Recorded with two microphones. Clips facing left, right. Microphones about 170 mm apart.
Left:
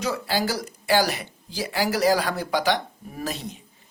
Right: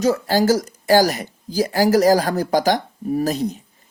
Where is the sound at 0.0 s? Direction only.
45° right (ahead or behind).